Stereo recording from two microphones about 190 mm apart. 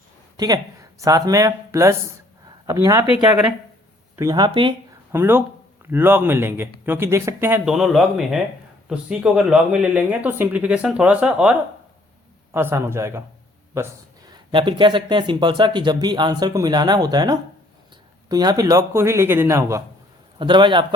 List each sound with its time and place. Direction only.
0.3 s speech: 20° right (ahead or behind)
4.2 s speech: 20° right (ahead or behind)
5.1 s speech: 10° right (ahead or behind)
14.3 s speech: 25° right (ahead or behind)
20.4 s speech: 25° right (ahead or behind)